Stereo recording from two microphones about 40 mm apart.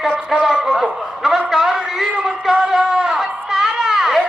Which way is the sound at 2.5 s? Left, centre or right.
Centre.